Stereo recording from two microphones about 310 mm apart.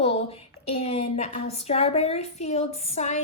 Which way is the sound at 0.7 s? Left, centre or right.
Centre.